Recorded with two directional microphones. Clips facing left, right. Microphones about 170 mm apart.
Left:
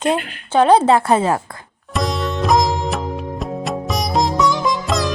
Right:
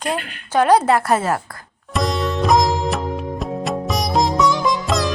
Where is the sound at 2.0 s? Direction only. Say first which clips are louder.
Right 1 dB; centre (ahead or behind).